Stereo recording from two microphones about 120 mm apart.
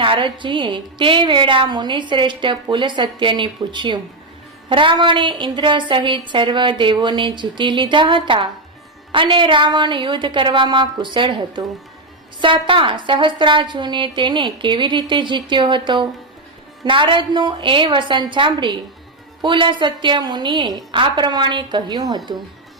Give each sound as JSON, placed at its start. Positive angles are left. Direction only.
{"t": 0.0, "sound": "a woman's voice", "side_deg": -45}